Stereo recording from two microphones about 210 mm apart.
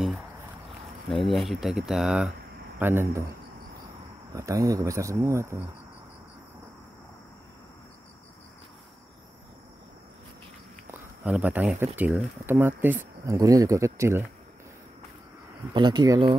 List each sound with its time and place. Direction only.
1.0 s speech: centre (ahead or behind)
4.3 s speech: 15° right (ahead or behind)
10.9 s speech: 5° right (ahead or behind)
15.7 s speech: 20° right (ahead or behind)